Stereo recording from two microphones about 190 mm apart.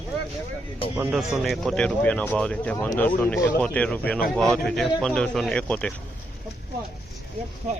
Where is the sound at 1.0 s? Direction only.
5° right (ahead or behind).